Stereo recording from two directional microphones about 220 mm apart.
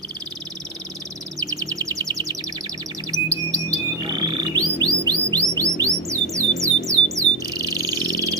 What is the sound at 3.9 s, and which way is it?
Frog, 20° right (ahead or behind).